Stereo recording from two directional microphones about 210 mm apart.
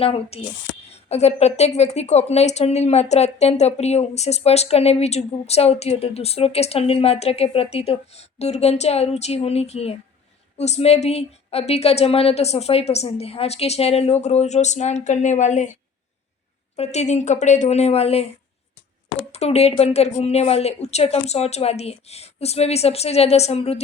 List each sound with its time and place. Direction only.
0.0 s a woman's voice: 30° left (ahead or behind)
16.7 s a woman's voice: 30° left (ahead or behind)
19.3 s speech: 30° left (ahead or behind)